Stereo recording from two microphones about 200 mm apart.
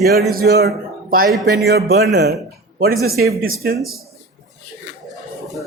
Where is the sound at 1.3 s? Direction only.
Centre (ahead or behind).